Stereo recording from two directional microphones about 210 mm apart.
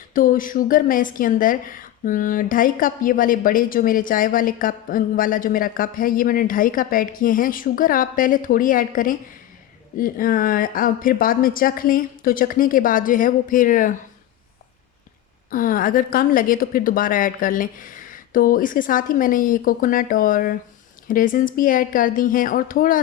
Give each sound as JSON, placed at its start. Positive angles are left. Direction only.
{"t": 0.1, "sound": "a woman's voice", "side_deg": 40}
{"t": 15.4, "sound": "a woman's voice", "side_deg": 40}